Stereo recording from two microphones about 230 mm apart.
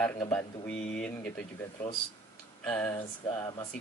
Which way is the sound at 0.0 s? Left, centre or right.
Centre.